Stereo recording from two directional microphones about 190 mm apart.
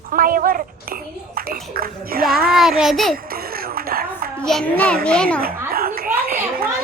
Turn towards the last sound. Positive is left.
turn(degrees=-50)  # may be behind; listen again after turning